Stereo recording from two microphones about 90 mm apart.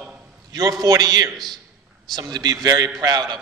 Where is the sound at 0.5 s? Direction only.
45° right (ahead or behind).